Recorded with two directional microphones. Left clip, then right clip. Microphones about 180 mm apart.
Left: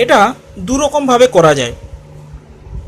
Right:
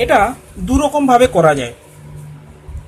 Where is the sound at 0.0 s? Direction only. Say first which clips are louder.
Left 3 dB; 30° left (ahead or behind).